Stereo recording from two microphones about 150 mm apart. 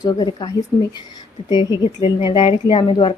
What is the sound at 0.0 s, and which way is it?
A woman's voice, 30° left (ahead or behind).